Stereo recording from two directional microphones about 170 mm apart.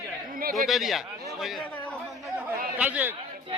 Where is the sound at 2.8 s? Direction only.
10° right (ahead or behind).